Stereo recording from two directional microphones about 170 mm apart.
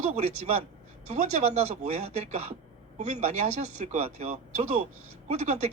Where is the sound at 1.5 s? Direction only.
40° right (ahead or behind).